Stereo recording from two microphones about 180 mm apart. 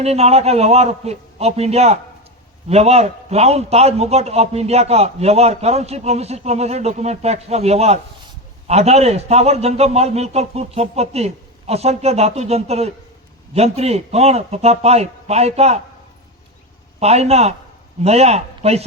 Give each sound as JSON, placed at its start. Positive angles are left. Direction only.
{"t": 0.0, "sound": "a man's voice", "side_deg": -35}
{"t": 17.0, "sound": "a man's voice", "side_deg": -35}